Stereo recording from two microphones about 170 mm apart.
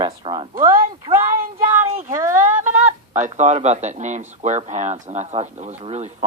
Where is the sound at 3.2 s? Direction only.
45° right (ahead or behind).